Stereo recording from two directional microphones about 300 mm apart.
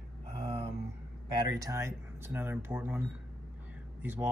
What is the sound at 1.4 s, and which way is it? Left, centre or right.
Speech, centre.